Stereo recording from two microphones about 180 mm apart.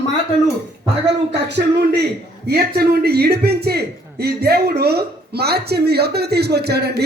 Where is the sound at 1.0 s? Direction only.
70° right (ahead or behind).